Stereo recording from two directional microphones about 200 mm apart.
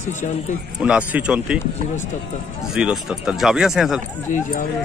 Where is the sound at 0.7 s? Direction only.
5° right (ahead or behind).